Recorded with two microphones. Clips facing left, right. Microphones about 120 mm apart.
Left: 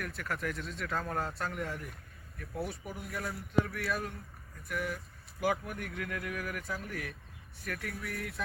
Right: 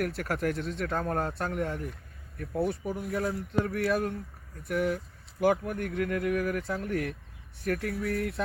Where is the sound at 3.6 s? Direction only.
50° right (ahead or behind).